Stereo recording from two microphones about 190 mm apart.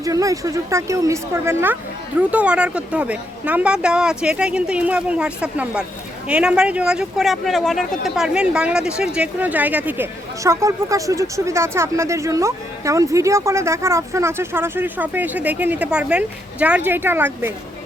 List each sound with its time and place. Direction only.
0.0 s speech: 15° right (ahead or behind)